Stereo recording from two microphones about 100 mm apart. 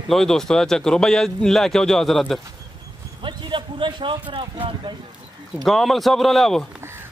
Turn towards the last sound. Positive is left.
turn(degrees=0)  # may be behind; listen again after turning